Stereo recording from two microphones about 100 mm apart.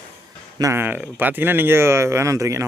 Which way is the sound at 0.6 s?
25° right (ahead or behind).